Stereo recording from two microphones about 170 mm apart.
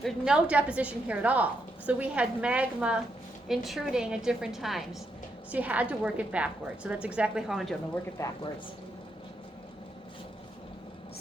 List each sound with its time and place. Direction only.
0.0 s a woman's voice: 5° right (ahead or behind)
8.2 s speech: 20° left (ahead or behind)